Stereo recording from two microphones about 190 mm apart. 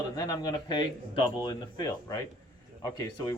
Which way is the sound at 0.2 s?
20° left (ahead or behind).